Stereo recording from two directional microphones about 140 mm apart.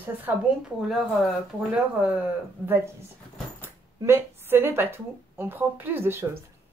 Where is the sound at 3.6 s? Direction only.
15° right (ahead or behind).